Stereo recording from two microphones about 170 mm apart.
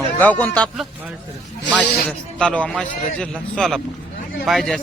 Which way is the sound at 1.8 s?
5° left (ahead or behind).